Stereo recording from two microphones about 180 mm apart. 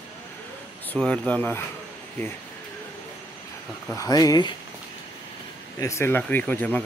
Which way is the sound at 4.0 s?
20° left (ahead or behind).